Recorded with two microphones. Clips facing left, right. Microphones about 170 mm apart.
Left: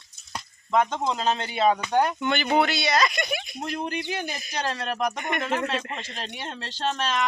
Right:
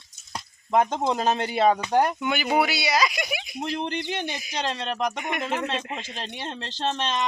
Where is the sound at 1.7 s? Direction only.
30° right (ahead or behind).